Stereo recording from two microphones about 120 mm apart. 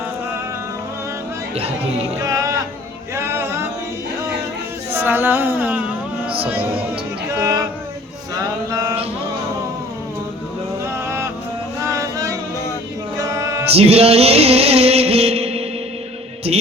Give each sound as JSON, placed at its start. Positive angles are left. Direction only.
{"t": 1.5, "sound": "speech", "side_deg": -60}
{"t": 2.2, "sound": "music", "side_deg": -30}
{"t": 4.9, "sound": "a sound", "side_deg": -15}
{"t": 7.3, "sound": "a sound", "side_deg": -25}
{"t": 8.7, "sound": "mantra", "side_deg": -30}
{"t": 11.9, "sound": "music", "side_deg": -25}
{"t": 13.1, "sound": "mantra", "side_deg": -25}
{"t": 13.7, "sound": "music", "side_deg": -55}